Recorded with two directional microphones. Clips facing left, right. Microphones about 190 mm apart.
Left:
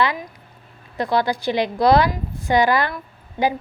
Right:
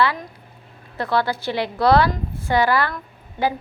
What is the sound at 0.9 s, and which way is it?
A woman's voice, 15° left (ahead or behind).